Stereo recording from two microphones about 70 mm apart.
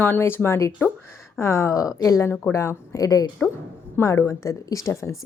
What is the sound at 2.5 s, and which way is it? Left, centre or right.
Speech, left.